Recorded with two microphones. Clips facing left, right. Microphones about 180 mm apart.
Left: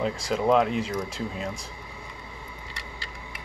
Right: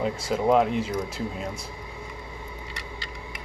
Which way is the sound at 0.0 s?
5° right (ahead or behind).